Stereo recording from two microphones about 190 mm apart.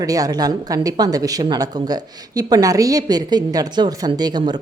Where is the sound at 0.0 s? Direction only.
20° right (ahead or behind).